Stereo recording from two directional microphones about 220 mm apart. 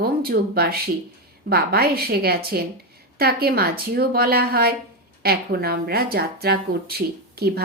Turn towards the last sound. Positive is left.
turn(degrees=-45)  # may be behind; listen again after turning